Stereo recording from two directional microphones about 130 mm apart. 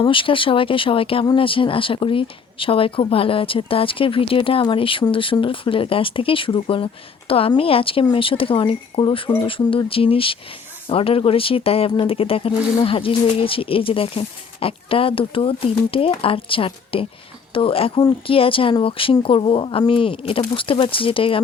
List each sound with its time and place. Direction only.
0.0 s speech: 40° left (ahead or behind)